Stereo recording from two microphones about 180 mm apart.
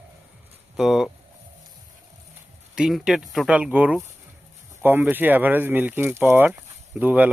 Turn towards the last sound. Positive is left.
turn(degrees=-10)  # may be behind; listen again after turning